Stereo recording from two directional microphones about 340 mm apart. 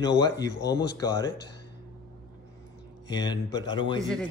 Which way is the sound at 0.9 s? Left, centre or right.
Centre.